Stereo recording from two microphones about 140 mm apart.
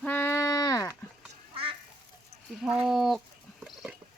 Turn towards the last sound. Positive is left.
turn(degrees=0)  # may be behind; listen again after turning